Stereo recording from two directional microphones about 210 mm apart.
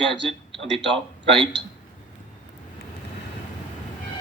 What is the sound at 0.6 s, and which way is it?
Speech, 60° right (ahead or behind).